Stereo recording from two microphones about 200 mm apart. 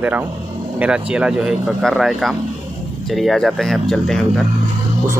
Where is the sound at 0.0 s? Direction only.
10° right (ahead or behind).